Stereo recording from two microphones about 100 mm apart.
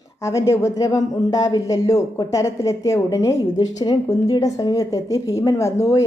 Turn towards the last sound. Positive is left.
turn(degrees=30)  # may be behind; listen again after turning